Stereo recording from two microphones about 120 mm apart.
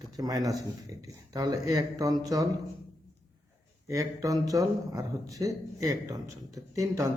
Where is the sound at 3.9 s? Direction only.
30° right (ahead or behind).